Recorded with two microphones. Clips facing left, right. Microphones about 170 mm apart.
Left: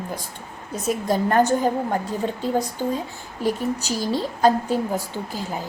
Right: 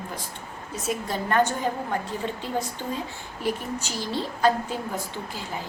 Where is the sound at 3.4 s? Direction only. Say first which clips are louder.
Left 5 dB; 40° left (ahead or behind).